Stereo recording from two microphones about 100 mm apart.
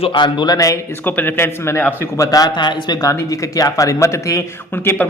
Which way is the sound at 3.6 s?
35° left (ahead or behind).